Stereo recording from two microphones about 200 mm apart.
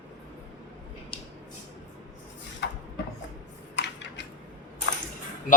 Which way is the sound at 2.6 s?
60° left (ahead or behind).